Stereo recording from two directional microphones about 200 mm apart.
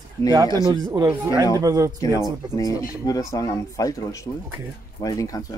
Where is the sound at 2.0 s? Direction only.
15° left (ahead or behind).